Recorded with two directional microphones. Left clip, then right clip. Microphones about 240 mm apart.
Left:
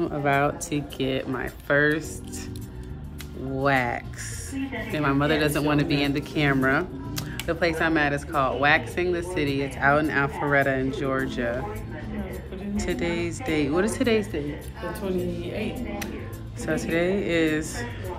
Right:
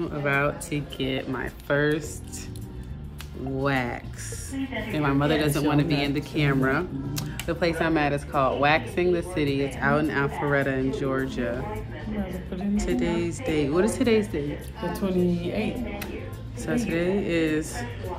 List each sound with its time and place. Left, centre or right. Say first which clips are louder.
0.0 s speech: left 2 dB; centre
3.5 s speech: left 4 dB; centre
12.7 s speech: right 1 dB; centre
15.0 s a woman's voice: right 3 dB; right
16.6 s speech: left 2 dB; centre